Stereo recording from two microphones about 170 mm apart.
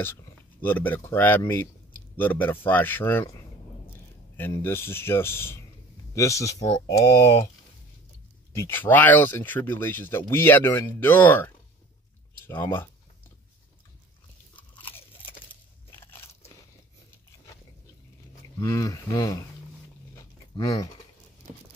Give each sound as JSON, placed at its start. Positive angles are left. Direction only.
{"t": 0.0, "sound": "speech", "side_deg": 10}
{"t": 4.4, "sound": "speech", "side_deg": 15}
{"t": 8.5, "sound": "speech", "side_deg": 10}
{"t": 14.5, "sound": "crunch", "side_deg": 10}
{"t": 16.0, "sound": "biting", "side_deg": 15}
{"t": 18.6, "sound": "speech", "side_deg": 20}
{"t": 20.5, "sound": "speech", "side_deg": 20}